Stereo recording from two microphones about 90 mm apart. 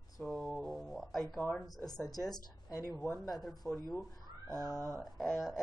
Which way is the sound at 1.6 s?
45° left (ahead or behind).